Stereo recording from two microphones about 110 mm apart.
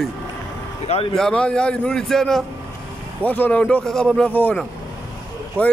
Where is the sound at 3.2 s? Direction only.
15° left (ahead or behind).